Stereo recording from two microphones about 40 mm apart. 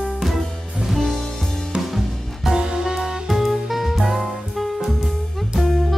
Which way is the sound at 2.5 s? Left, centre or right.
Centre.